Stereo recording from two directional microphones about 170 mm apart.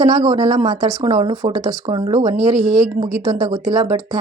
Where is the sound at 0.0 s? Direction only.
30° right (ahead or behind).